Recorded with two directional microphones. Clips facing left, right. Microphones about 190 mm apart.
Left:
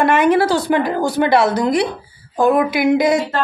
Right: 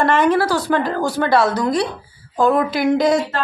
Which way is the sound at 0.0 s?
10° left (ahead or behind).